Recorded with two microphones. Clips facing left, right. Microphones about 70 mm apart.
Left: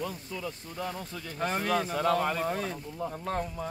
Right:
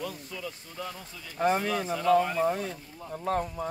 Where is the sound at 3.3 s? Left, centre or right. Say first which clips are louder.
Right 6 dB; centre.